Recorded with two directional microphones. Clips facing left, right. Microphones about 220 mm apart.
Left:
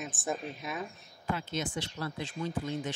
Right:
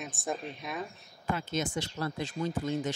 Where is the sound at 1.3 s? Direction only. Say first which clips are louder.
Right 4 dB; 45° right (ahead or behind).